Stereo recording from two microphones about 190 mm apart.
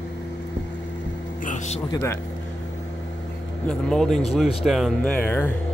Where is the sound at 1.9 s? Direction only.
15° left (ahead or behind).